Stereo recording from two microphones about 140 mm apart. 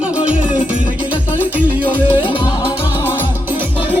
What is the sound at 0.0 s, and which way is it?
Music, 10° right (ahead or behind).